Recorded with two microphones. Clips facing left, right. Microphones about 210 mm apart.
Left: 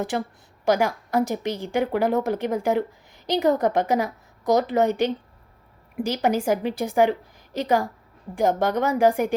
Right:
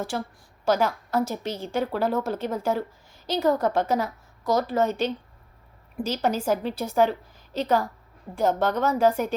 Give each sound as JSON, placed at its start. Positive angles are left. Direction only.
{"t": 0.0, "sound": "a woman's voice", "side_deg": 15}